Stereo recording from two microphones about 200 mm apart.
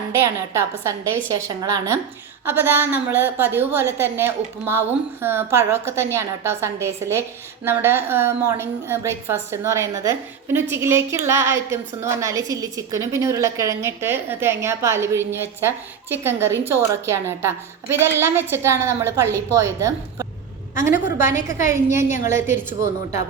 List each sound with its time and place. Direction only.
0.3 s a woman's voice: 15° right (ahead or behind)
2.4 s a woman's voice: 10° right (ahead or behind)
20.9 s a woman's voice: 40° left (ahead or behind)
21.7 s a woman's voice: 15° right (ahead or behind)